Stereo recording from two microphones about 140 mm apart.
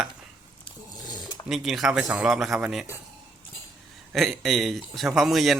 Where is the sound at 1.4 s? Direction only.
Centre (ahead or behind).